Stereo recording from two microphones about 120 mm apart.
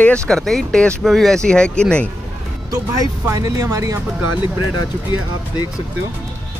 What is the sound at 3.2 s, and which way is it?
Speech, 30° right (ahead or behind).